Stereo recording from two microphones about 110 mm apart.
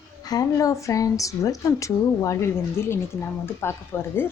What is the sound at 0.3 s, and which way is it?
A woman's voice, 35° left (ahead or behind).